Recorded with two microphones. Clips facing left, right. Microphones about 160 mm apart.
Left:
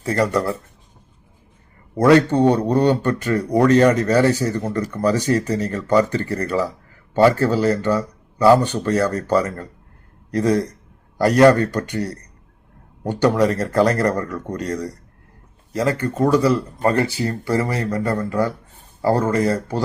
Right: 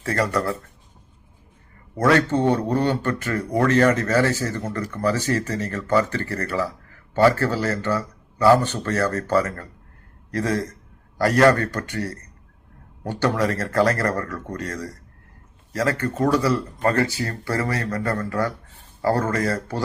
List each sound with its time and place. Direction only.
0.0 s speech: 15° left (ahead or behind)
2.0 s speech: 15° left (ahead or behind)